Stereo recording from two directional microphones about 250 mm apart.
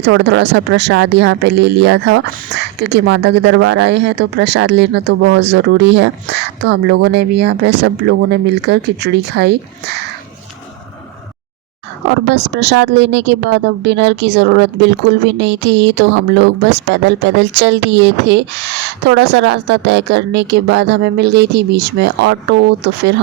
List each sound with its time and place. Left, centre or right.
0.0 s a woman's voice: right
12.3 s a woman's voice: right